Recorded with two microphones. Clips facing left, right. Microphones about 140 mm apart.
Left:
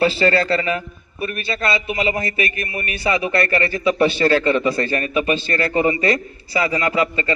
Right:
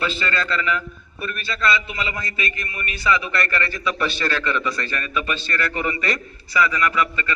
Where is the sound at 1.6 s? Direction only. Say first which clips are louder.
Left 2 dB; 20° left (ahead or behind).